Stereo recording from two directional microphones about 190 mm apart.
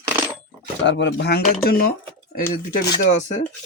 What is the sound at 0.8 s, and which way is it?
Speech, 70° left (ahead or behind).